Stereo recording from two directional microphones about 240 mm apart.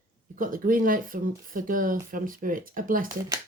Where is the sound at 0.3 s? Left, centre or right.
Right.